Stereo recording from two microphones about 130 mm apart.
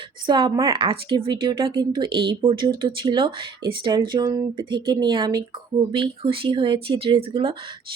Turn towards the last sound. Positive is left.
turn(degrees=-45)  # may be behind; listen again after turning